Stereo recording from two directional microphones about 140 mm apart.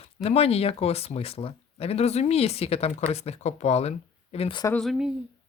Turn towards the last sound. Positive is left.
turn(degrees=0)  # may be behind; listen again after turning